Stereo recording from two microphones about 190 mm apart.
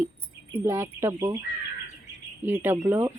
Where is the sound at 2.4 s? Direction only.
10° right (ahead or behind).